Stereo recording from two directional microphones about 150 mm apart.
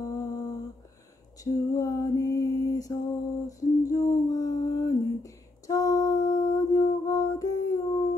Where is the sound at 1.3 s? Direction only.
20° left (ahead or behind).